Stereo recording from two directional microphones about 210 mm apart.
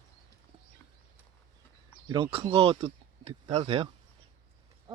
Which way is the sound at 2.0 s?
20° right (ahead or behind).